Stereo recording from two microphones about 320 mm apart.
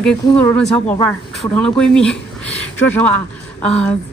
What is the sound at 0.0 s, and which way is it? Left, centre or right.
A woman's voice, centre.